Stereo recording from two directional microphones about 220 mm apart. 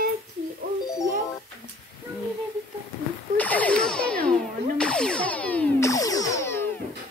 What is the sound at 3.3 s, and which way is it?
Music, 5° left (ahead or behind).